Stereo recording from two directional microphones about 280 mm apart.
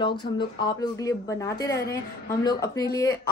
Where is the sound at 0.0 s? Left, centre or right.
Centre.